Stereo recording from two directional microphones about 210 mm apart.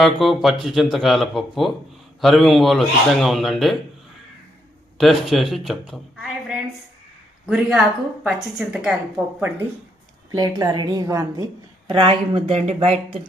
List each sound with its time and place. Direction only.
0.0 s speech: centre (ahead or behind)
4.9 s a woman's voice: centre (ahead or behind); by 13.0 s 30° right (ahead or behind)